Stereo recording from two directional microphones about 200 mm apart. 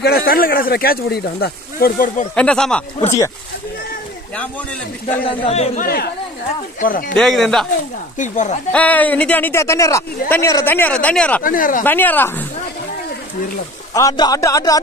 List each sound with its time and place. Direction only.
0.0 s speech: 50° left (ahead or behind)
2.3 s speech: 5° left (ahead or behind)
5.2 s speech: 30° left (ahead or behind)
5.9 s speech: 50° left (ahead or behind)
7.2 s speech: centre (ahead or behind)
8.2 s speech: 40° left (ahead or behind)
8.7 s speech: 10° left (ahead or behind)
11.4 s speech: 45° left (ahead or behind)
11.8 s speech: 10° left (ahead or behind)
13.9 s speech: 20° left (ahead or behind)